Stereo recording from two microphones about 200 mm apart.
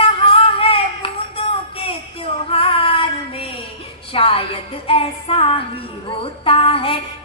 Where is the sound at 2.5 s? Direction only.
30° left (ahead or behind).